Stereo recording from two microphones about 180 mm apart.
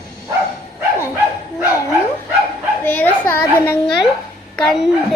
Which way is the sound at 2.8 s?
10° left (ahead or behind).